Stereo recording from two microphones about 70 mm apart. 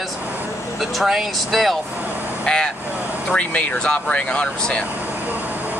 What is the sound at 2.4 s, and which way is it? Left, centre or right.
Speech, centre.